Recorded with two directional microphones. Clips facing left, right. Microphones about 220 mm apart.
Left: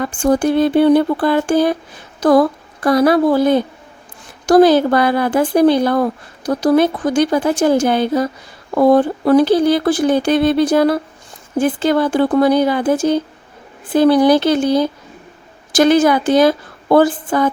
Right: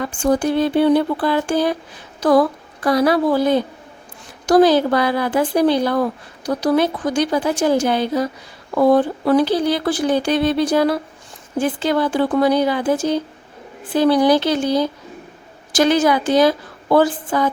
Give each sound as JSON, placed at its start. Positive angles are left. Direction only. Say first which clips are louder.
{"t": 0.0, "sound": "speech", "louder": "left 3 dB", "side_deg": 50}
{"t": 2.8, "sound": "speech", "louder": "left 3 dB", "side_deg": 50}